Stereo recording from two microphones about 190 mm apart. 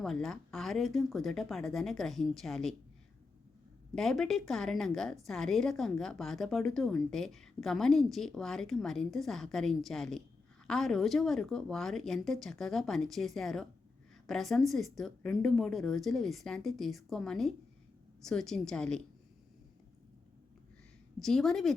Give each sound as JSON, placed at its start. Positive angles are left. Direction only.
{"t": 0.0, "sound": "a woman's voice", "side_deg": 0}
{"t": 3.9, "sound": "a woman's voice", "side_deg": 0}
{"t": 21.2, "sound": "a woman's voice", "side_deg": 0}